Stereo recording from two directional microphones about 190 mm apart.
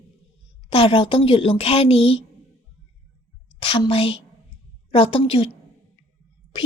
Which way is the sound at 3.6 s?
25° left (ahead or behind).